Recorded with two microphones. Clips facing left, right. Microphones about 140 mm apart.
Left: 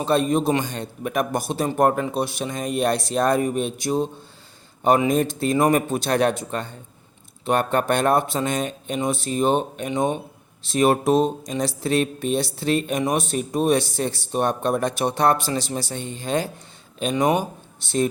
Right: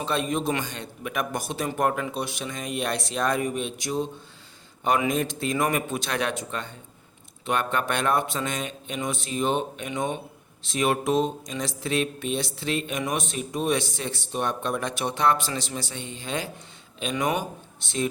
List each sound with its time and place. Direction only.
0.0 s speech: 40° left (ahead or behind)